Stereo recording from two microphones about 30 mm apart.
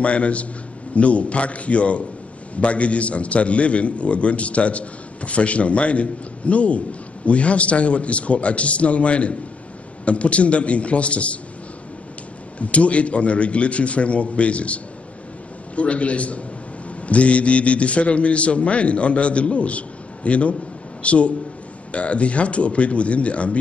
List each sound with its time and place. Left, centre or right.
0.0 s a man's voice: left
12.5 s a man's voice: left